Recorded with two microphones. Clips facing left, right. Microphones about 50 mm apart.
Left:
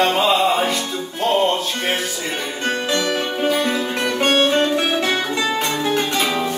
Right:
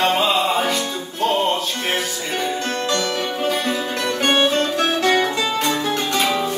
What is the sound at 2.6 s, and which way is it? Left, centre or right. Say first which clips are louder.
Music: left 1 dB; centre.